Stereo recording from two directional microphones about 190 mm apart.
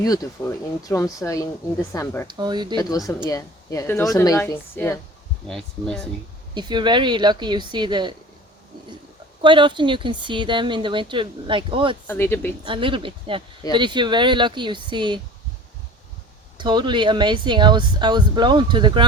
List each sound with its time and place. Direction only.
0.0 s a woman's voice: 20° left (ahead or behind)
2.2 s a woman's voice: 25° right (ahead or behind)
2.7 s a woman's voice: 20° left (ahead or behind)
5.5 s speech: centre (ahead or behind)
6.5 s a woman's voice: 25° right (ahead or behind)
9.4 s a woman's voice: 25° right (ahead or behind)
12.0 s a woman's voice: 10° left (ahead or behind)
12.6 s a woman's voice: 25° right (ahead or behind)
16.6 s a woman's voice: 25° right (ahead or behind)